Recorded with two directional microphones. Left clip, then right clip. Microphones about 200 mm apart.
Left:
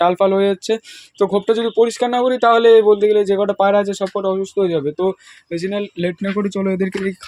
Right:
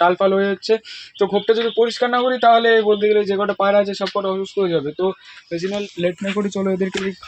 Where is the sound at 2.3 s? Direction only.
40° left (ahead or behind).